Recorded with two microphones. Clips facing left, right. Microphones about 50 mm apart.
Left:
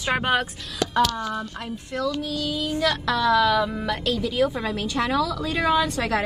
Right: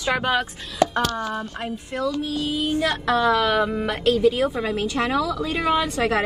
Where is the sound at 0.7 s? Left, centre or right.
Right.